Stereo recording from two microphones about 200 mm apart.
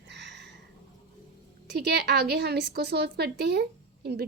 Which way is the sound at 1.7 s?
55° right (ahead or behind).